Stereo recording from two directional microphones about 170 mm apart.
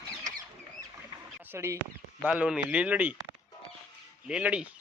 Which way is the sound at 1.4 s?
15° right (ahead or behind).